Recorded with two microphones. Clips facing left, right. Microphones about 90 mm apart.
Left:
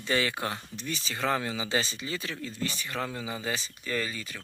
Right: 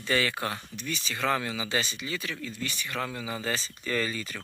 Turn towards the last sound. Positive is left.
turn(degrees=5)  # may be behind; listen again after turning